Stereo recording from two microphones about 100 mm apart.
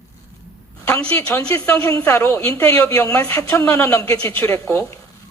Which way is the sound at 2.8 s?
35° left (ahead or behind).